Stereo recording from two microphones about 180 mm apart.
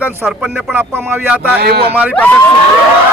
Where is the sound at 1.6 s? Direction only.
60° right (ahead or behind).